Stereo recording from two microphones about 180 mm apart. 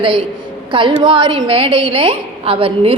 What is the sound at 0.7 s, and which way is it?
A woman's voice, 25° right (ahead or behind).